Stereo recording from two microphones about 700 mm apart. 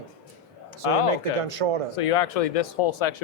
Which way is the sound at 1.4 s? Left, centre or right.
Right.